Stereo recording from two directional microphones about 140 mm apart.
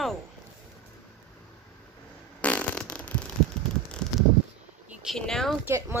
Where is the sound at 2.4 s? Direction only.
10° left (ahead or behind).